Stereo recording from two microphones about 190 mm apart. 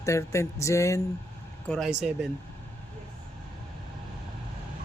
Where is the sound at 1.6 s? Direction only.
5° left (ahead or behind).